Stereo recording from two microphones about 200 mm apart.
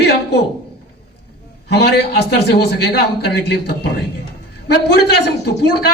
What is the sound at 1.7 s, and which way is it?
A man's voice, 55° left (ahead or behind).